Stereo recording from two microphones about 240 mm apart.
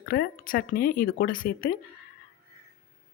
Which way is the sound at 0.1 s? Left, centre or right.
Left.